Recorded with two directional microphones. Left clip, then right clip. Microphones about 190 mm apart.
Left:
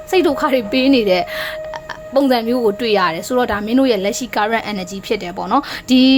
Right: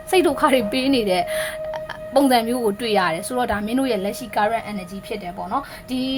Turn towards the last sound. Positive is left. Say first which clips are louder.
# left 13 dB
turn(degrees=35)  # may be behind; listen again after turning